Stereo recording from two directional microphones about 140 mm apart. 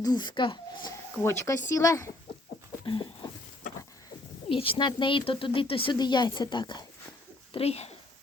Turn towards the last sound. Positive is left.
turn(degrees=50)  # may be behind; listen again after turning